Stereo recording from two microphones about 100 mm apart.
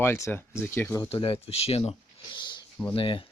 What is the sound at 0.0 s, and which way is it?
Speech, 25° left (ahead or behind).